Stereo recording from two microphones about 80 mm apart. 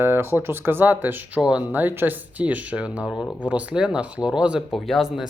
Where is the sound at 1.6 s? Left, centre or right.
Right.